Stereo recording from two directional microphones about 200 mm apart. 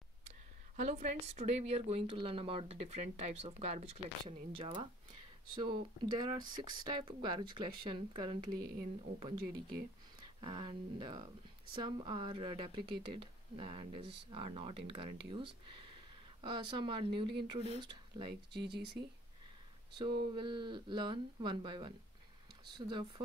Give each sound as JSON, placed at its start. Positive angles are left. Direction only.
{"t": 0.7, "sound": "speech", "side_deg": -35}
{"t": 20.0, "sound": "speech", "side_deg": -25}